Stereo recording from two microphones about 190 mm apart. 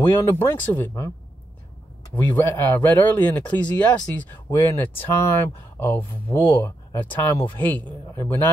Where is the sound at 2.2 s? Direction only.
10° left (ahead or behind).